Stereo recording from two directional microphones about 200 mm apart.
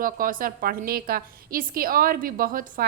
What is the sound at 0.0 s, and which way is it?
A woman's voice, 45° right (ahead or behind).